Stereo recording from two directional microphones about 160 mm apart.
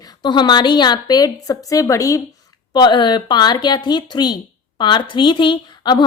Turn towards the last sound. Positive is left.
turn(degrees=25)  # may be behind; listen again after turning